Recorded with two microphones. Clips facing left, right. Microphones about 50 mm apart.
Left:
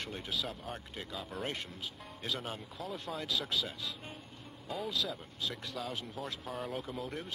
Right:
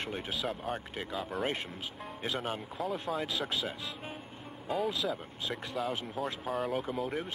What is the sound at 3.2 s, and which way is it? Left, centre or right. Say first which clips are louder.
Speech: right 2 dB; right.